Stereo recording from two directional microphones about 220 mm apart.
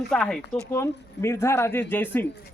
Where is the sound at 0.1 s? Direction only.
Centre (ahead or behind).